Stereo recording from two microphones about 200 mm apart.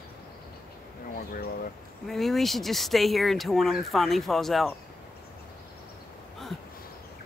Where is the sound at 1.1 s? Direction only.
45° left (ahead or behind).